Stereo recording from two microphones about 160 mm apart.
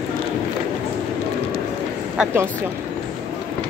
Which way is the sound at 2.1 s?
15° right (ahead or behind).